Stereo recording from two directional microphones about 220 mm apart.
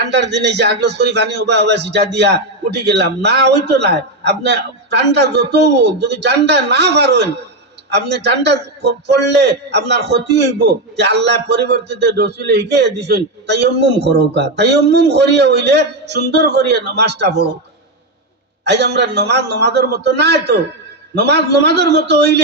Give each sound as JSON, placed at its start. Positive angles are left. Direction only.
{"t": 0.1, "sound": "a man's voice", "side_deg": -50}
{"t": 18.6, "sound": "a man's voice", "side_deg": -50}